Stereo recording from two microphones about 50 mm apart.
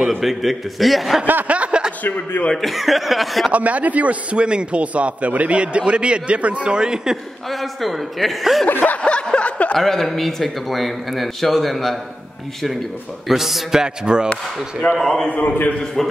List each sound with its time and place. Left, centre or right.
0.2 s a man's voice: centre
1.5 s a sound: right
2.0 s a man's voice: left
2.5 s a man's voice: centre
3.5 s a man's voice: right; by 7.2 s centre
7.4 s a man's voice: centre
8.6 s a man's voice: left
8.9 s a sound: left
9.8 s a man's voice: centre
13.3 s music: centre
14.3 s speech: left
15.0 s a man's voice: centre
15.2 s a man's voice: left
16.0 s a man's voice: centre